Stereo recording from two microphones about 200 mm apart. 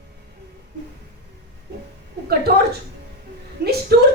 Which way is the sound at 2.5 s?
50° right (ahead or behind).